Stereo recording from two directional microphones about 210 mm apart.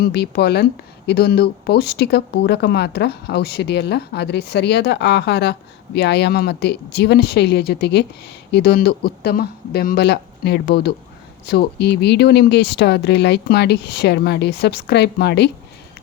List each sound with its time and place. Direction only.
0.0 s speech: 50° left (ahead or behind)